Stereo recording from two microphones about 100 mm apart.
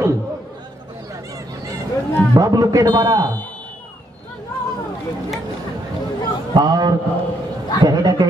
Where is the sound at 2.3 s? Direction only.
35° right (ahead or behind).